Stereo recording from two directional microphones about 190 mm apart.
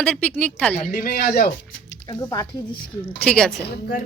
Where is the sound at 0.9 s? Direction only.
50° left (ahead or behind).